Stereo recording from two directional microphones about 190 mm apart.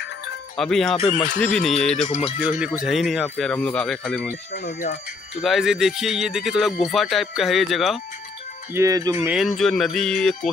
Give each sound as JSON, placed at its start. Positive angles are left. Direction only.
{"t": 0.6, "sound": "speech", "side_deg": 0}
{"t": 0.9, "sound": "speech", "side_deg": 35}
{"t": 1.4, "sound": "speech", "side_deg": 0}
{"t": 2.0, "sound": "speech", "side_deg": 35}
{"t": 2.8, "sound": "speech", "side_deg": 0}
{"t": 4.3, "sound": "speech", "side_deg": 50}
{"t": 5.4, "sound": "speech", "side_deg": 0}
{"t": 8.7, "sound": "speech", "side_deg": -15}
{"t": 9.6, "sound": "speech", "side_deg": 0}